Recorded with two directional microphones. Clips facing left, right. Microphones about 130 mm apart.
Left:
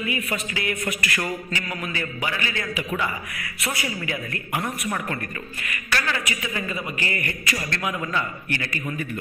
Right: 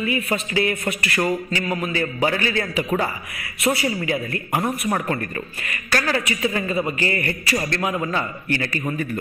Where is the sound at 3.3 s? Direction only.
25° right (ahead or behind).